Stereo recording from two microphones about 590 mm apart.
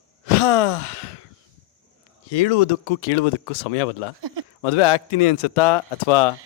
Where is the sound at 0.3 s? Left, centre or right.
Left.